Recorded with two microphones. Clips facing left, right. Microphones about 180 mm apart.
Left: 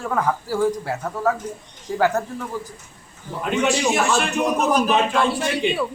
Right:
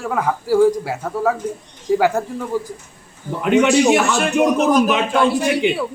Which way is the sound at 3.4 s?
70° right (ahead or behind).